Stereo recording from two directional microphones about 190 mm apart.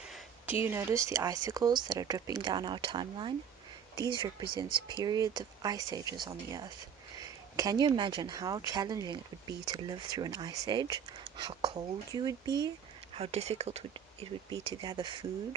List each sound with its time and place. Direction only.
0.0 s a sound: 5° right (ahead or behind)
0.6 s speech: 10° right (ahead or behind)
13.1 s speech: 30° right (ahead or behind)